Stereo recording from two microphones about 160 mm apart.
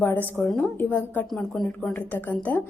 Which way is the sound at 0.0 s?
10° left (ahead or behind).